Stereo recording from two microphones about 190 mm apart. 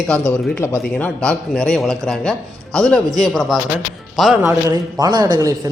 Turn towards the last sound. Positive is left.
turn(degrees=-20)  # may be behind; listen again after turning